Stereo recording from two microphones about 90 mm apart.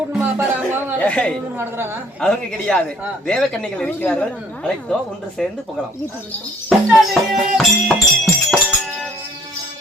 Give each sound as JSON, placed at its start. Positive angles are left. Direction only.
{"t": 0.1, "sound": "music", "side_deg": -20}
{"t": 0.9, "sound": "speech", "side_deg": 15}
{"t": 1.5, "sound": "a woman's voice", "side_deg": -25}
{"t": 2.2, "sound": "speech", "side_deg": 10}
{"t": 5.4, "sound": "music", "side_deg": 5}
{"t": 6.7, "sound": "music", "side_deg": 0}